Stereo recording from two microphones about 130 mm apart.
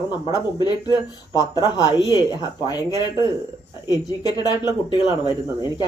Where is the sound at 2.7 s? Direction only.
30° left (ahead or behind).